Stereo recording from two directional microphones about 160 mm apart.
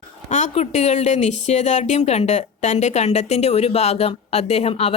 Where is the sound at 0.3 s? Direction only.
50° left (ahead or behind).